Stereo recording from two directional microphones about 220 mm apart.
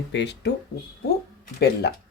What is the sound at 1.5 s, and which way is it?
Speech, 45° left (ahead or behind).